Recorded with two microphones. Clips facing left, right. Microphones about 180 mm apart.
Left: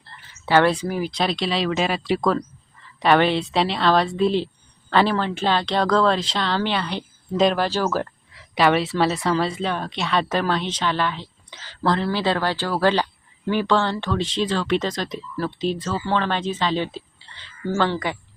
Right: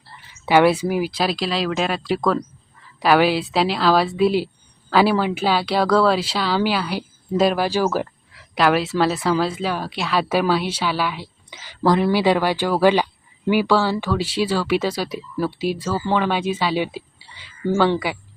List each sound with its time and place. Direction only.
0.0 s a woman's voice: 10° right (ahead or behind)
8.3 s speech: centre (ahead or behind)